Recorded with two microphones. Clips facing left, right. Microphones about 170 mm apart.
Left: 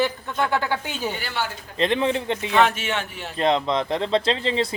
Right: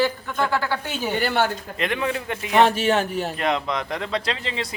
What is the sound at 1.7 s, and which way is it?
Speech, 30° left (ahead or behind).